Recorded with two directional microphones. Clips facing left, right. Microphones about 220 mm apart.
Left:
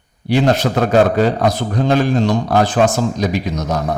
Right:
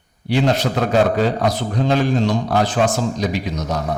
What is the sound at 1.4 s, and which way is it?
A man's voice, 45° left (ahead or behind).